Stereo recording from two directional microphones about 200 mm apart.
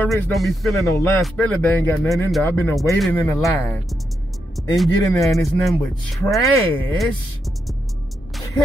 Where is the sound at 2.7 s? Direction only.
Centre (ahead or behind).